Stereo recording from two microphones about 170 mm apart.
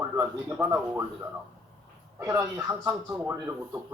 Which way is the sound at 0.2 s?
10° right (ahead or behind).